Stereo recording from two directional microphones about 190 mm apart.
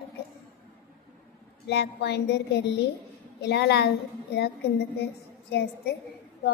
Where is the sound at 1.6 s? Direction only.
60° left (ahead or behind).